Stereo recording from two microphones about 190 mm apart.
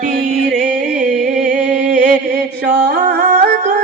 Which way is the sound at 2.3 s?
55° right (ahead or behind).